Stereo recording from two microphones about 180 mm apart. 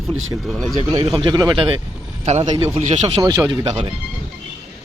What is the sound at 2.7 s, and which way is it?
Speech, 40° right (ahead or behind).